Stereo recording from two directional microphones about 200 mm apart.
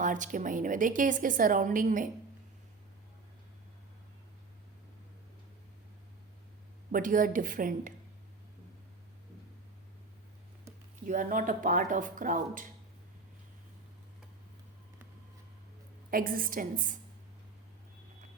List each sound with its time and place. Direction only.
0.0 s a woman's voice: 40° right (ahead or behind)
6.9 s a woman's voice: 40° right (ahead or behind)
11.0 s a woman's voice: 40° right (ahead or behind)
16.0 s a woman's voice: 45° right (ahead or behind)